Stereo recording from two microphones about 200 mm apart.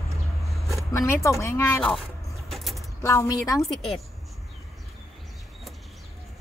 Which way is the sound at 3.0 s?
15° left (ahead or behind).